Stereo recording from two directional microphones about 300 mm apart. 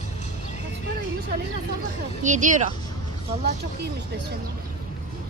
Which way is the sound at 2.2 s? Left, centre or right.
Right.